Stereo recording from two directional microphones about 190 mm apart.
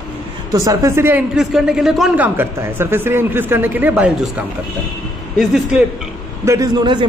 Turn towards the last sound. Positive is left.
turn(degrees=-20)  # may be behind; listen again after turning